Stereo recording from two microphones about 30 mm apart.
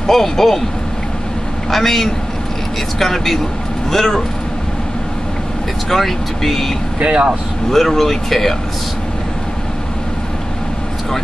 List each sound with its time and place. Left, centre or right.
0.0 s speech: centre
1.7 s speech: centre
5.9 s speech: centre
7.1 s speech: right
7.7 s speech: centre